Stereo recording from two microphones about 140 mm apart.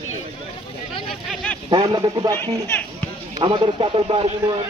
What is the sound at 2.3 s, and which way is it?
Speech, 15° left (ahead or behind).